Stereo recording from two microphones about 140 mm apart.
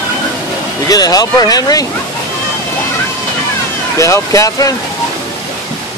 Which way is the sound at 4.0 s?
20° left (ahead or behind).